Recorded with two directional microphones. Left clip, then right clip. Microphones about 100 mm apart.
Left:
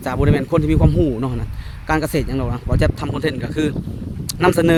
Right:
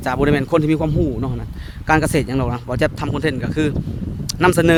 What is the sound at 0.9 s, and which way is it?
Speech, 20° left (ahead or behind).